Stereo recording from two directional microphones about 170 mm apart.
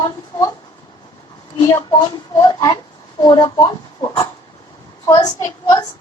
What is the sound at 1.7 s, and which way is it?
A woman's voice, 20° left (ahead or behind).